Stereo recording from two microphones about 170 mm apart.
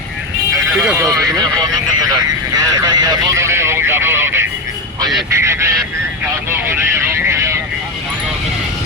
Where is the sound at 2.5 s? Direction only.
20° right (ahead or behind).